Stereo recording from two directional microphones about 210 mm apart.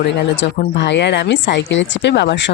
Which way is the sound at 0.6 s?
55° left (ahead or behind).